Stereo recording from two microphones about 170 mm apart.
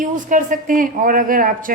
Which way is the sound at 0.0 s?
50° right (ahead or behind).